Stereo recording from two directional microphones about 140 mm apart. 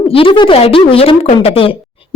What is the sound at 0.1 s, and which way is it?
Speech, 40° left (ahead or behind).